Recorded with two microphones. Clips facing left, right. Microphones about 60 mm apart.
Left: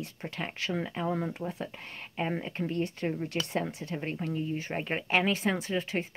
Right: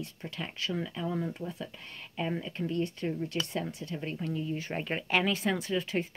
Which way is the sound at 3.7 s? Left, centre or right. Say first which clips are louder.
Left 2 dB; left.